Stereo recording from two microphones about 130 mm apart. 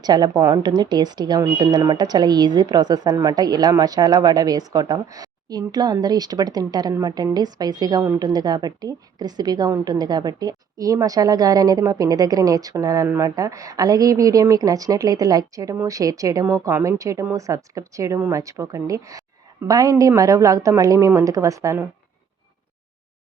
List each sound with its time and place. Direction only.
0.0 s a woman's voice: 30° right (ahead or behind)